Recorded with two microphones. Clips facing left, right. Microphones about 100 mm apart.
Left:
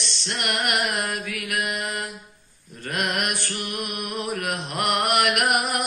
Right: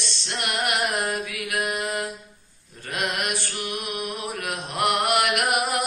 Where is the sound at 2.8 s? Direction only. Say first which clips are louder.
Left 1 dB; 50° left (ahead or behind).